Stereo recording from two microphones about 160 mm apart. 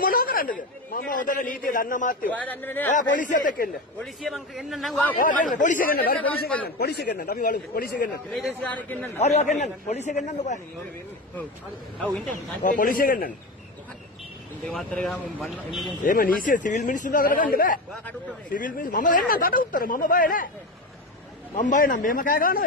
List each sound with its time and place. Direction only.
0.0 s a man's voice: 65° left (ahead or behind)
2.2 s a man's voice: 10° left (ahead or behind)
2.9 s speech: 55° left (ahead or behind)
4.0 s a man's voice: centre (ahead or behind)
5.2 s speech: 55° left (ahead or behind)
6.8 s speech: 85° left
8.3 s a man's voice: centre (ahead or behind)
9.2 s a man's voice: 45° left (ahead or behind)
12.6 s speech: 60° left (ahead or behind)
14.6 s a man's voice: 5° left (ahead or behind)
16.0 s speech: 60° left (ahead or behind)
21.5 s speech: 55° left (ahead or behind)